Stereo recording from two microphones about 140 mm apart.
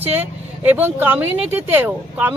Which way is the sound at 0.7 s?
15° right (ahead or behind).